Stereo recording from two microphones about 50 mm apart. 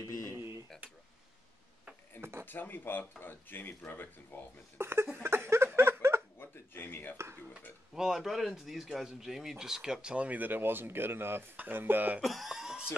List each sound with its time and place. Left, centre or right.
2.4 s speech: left
4.7 s speech: right
5.1 s a sound: right
5.8 s giggle: right
6.4 s speech: left
7.9 s speech: centre
10.1 s speech: right
11.5 s speech: right
12.2 s cough: centre